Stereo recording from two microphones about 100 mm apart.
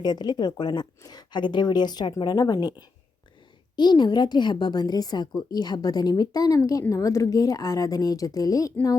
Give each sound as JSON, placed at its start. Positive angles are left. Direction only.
{"t": 0.0, "sound": "a woman's voice", "side_deg": 45}
{"t": 3.8, "sound": "a woman's voice", "side_deg": 50}